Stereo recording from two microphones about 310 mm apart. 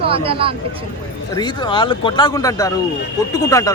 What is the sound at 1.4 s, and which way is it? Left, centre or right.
Speech, centre.